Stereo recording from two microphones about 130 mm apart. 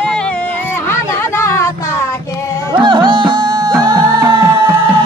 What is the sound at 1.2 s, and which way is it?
Music, 20° left (ahead or behind).